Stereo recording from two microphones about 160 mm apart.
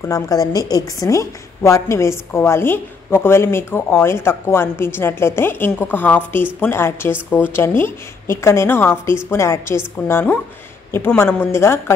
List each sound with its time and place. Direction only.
0.0 s a woman's voice: 20° left (ahead or behind)